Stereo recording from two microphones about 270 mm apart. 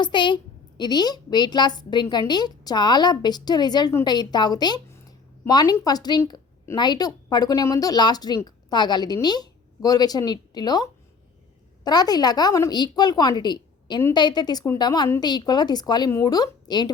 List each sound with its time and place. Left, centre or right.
0.0 s a woman's voice: centre